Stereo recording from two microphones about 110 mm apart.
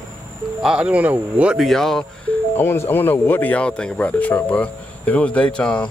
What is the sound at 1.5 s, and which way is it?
Speech, centre (ahead or behind).